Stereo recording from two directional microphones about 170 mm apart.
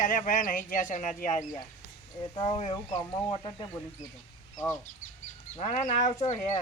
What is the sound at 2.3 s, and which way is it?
Speech, 25° left (ahead or behind).